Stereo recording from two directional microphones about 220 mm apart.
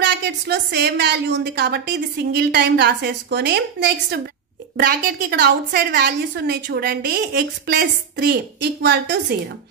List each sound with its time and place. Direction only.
0.0 s a woman's voice: 50° right (ahead or behind)